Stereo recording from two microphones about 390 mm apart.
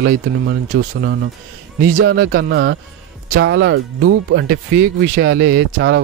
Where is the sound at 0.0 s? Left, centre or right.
Right.